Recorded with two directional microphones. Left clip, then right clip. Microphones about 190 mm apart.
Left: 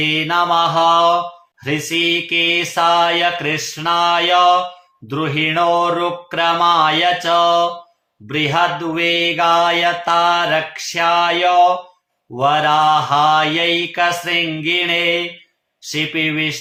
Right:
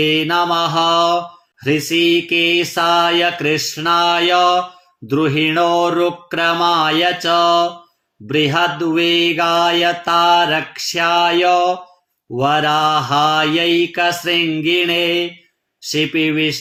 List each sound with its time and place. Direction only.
0.0 s mantra: 30° right (ahead or behind)